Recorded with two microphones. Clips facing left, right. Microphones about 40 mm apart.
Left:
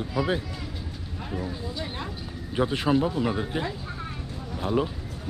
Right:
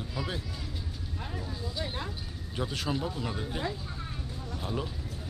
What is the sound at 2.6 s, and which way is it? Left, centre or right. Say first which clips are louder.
Speech: left 9 dB; left.